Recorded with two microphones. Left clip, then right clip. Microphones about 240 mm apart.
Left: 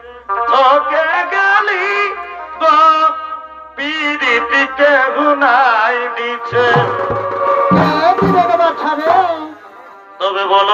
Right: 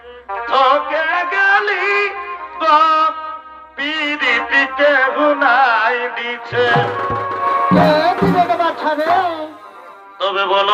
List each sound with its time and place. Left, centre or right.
0.4 s music: centre
7.3 s music: right
7.7 s speech: centre
10.2 s music: right